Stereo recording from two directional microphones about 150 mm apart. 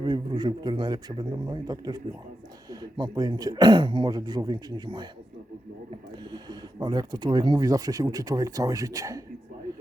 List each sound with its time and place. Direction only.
0.0 s speech: 30° right (ahead or behind)
6.3 s speech: 30° right (ahead or behind)